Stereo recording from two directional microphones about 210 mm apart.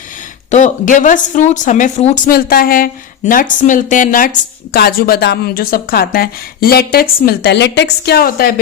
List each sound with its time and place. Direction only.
0.5 s speech: 35° left (ahead or behind)
2.3 s a woman's voice: 45° left (ahead or behind)